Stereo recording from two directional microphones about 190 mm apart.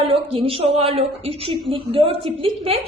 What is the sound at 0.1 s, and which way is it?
A woman's voice, 30° right (ahead or behind).